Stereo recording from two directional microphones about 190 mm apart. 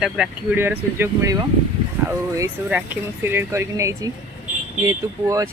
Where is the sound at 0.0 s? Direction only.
5° right (ahead or behind).